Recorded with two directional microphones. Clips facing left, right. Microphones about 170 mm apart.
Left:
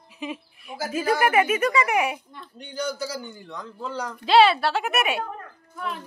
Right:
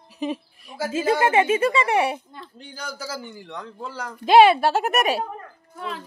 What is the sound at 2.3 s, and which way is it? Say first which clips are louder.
A man's voice: left 6 dB; 90° right.